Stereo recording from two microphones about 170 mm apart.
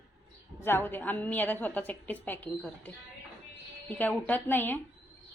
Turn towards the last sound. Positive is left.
turn(degrees=10)  # may be behind; listen again after turning